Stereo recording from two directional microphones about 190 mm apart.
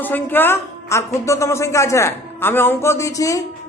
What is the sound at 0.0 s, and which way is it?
Speech, 10° left (ahead or behind).